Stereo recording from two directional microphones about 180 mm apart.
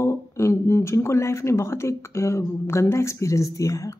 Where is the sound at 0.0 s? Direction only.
15° left (ahead or behind).